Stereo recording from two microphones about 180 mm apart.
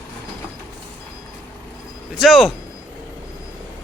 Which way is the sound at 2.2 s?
Centre (ahead or behind).